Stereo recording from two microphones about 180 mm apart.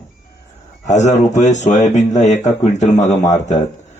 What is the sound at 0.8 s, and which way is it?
Speech, 40° left (ahead or behind).